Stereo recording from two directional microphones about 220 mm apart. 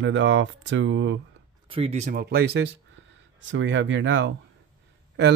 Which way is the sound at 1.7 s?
30° right (ahead or behind).